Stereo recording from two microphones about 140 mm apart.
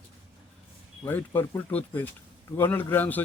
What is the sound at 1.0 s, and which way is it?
Speech, 15° left (ahead or behind).